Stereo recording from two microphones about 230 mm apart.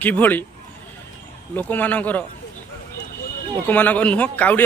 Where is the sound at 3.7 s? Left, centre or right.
Centre.